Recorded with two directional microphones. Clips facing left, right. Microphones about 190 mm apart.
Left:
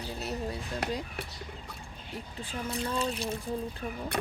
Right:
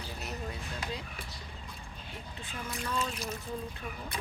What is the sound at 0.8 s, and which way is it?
Speech, 70° left (ahead or behind).